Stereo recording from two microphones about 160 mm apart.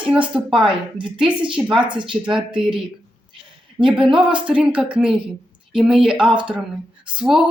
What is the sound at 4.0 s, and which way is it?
Speech, 30° right (ahead or behind).